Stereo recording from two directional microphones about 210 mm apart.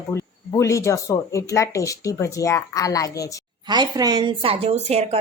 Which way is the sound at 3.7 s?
20° right (ahead or behind).